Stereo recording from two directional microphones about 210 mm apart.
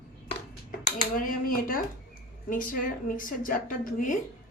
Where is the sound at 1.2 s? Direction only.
40° left (ahead or behind).